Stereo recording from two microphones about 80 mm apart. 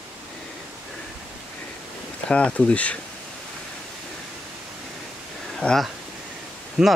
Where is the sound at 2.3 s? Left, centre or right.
Centre.